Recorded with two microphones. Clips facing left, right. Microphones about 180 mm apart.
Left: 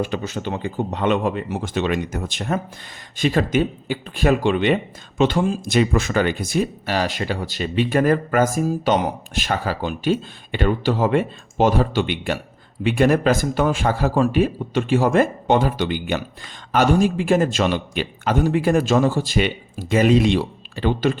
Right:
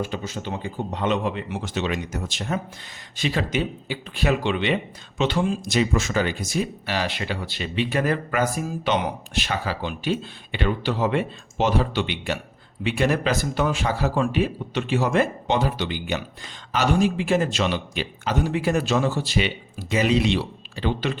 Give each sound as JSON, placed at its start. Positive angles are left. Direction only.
{"t": 0.0, "sound": "speech", "side_deg": 65}